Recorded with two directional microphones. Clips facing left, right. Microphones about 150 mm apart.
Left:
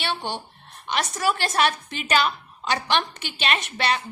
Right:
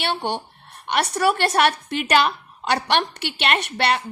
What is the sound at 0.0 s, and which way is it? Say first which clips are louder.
A woman's voice: right 4 dB; 60° right (ahead or behind).